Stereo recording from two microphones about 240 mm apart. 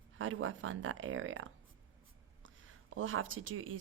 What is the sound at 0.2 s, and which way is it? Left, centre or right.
Speech, right.